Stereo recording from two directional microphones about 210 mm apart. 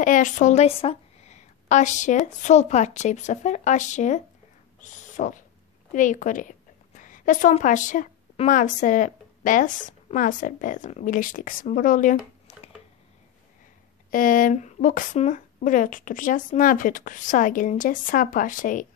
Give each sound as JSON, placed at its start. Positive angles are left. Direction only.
{"t": 0.0, "sound": "a woman's voice", "side_deg": 40}
{"t": 14.1, "sound": "speech", "side_deg": 40}